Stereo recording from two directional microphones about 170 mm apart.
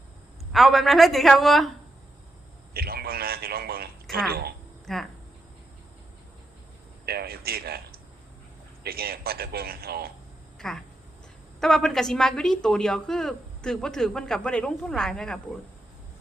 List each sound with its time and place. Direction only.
0.5 s a woman's voice: centre (ahead or behind)
2.7 s a sound: 65° right (ahead or behind)
4.1 s a woman's voice: 65° right (ahead or behind)
4.9 s a woman's voice: 5° left (ahead or behind)
7.0 s a man's voice: 65° right (ahead or behind)
10.6 s a woman's voice: 5° left (ahead or behind)